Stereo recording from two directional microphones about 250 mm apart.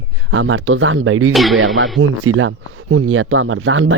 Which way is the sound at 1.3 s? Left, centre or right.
Centre.